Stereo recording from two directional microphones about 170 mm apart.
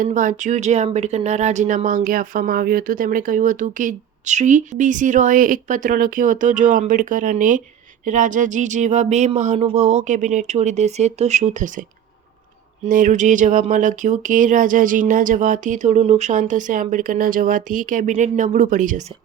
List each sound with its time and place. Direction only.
0.0 s speech: 50° right (ahead or behind)
12.9 s speech: 50° right (ahead or behind)